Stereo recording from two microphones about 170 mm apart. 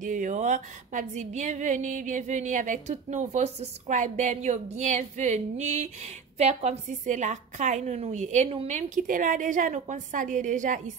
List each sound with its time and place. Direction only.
0.0 s speech: 50° right (ahead or behind)